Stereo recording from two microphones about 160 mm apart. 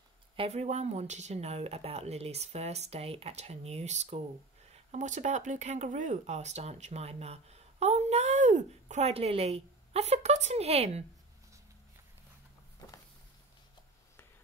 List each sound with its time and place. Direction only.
0.4 s speech: 40° right (ahead or behind)